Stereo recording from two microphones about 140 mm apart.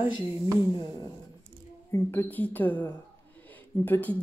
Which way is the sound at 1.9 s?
15° left (ahead or behind).